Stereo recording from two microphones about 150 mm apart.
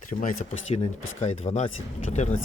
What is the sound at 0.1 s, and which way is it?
Speech, 45° left (ahead or behind).